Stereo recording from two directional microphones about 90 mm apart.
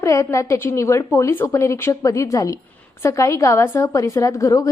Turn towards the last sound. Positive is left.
turn(degrees=35)  # may be behind; listen again after turning